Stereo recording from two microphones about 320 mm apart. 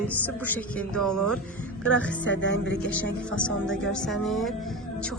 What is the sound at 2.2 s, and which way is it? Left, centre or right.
Speech, left.